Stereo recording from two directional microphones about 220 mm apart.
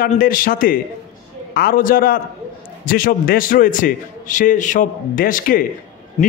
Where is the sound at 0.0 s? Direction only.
40° left (ahead or behind).